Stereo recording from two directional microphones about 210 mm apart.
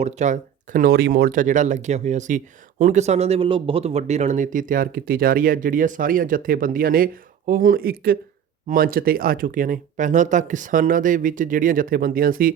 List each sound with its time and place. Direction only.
0.0 s speech: 35° right (ahead or behind)